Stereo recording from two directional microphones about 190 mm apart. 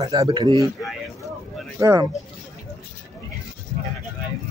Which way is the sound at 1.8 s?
15° right (ahead or behind).